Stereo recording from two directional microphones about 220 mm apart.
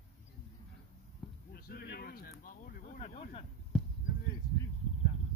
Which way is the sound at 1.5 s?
45° left (ahead or behind).